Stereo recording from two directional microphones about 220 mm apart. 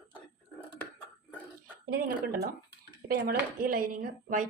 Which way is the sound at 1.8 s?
40° right (ahead or behind).